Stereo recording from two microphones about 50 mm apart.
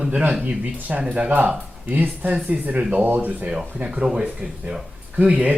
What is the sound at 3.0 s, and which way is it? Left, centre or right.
Speech, right.